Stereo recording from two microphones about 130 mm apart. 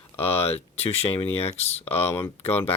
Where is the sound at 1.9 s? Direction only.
15° left (ahead or behind).